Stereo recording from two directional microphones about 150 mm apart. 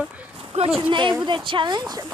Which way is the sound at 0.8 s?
35° right (ahead or behind).